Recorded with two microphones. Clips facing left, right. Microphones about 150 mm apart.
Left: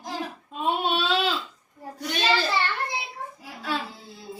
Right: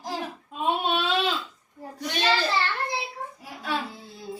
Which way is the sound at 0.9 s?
10° left (ahead or behind).